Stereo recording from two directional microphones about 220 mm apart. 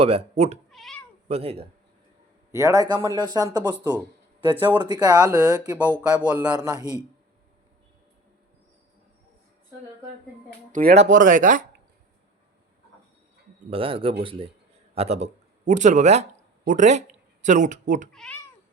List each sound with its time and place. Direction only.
0.0 s speech: 25° right (ahead or behind)
0.7 s cat: centre (ahead or behind)
1.3 s speech: 25° right (ahead or behind)
2.5 s speech: 15° right (ahead or behind)
4.8 s speech: 20° right (ahead or behind)
10.7 s speech: 40° right (ahead or behind)
13.7 s speech: 25° right (ahead or behind)
18.1 s speech: 5° left (ahead or behind)